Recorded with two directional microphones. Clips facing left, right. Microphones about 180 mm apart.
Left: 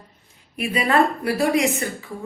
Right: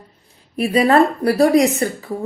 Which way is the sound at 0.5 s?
35° right (ahead or behind).